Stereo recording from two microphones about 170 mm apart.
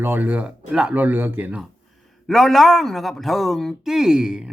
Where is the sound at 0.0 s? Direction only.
10° right (ahead or behind).